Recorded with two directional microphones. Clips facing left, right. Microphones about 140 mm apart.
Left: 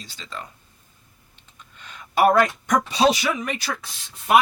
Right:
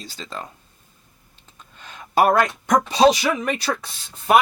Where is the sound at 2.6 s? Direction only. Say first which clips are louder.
Right 3 dB; 35° right (ahead or behind).